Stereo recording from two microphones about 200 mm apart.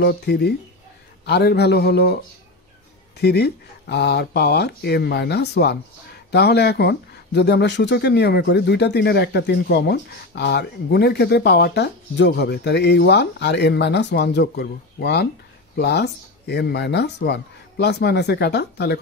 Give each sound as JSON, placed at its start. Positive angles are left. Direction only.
{"t": 0.0, "sound": "speech", "side_deg": 55}
{"t": 3.2, "sound": "speech", "side_deg": 55}